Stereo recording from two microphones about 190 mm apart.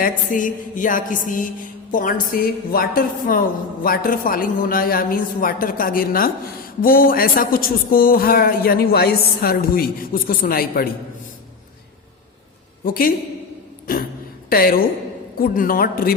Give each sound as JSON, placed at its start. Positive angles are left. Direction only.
{"t": 0.0, "sound": "speech", "side_deg": 45}
{"t": 12.8, "sound": "speech", "side_deg": 50}
{"t": 14.5, "sound": "speech", "side_deg": 50}